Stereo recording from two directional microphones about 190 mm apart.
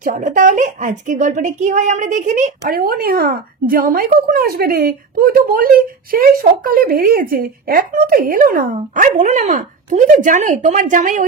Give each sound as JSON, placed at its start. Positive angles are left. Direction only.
{"t": 0.0, "sound": "a woman's voice", "side_deg": -45}